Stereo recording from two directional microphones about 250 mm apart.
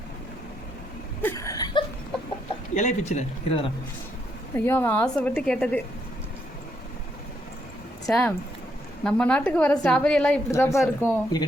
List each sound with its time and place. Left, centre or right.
1.2 s a sound: centre
2.7 s speech: left
4.5 s a woman's voice: centre
8.0 s a woman's voice: centre